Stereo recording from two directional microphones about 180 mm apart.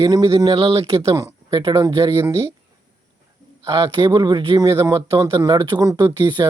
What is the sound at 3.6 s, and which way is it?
Speech, 25° right (ahead or behind).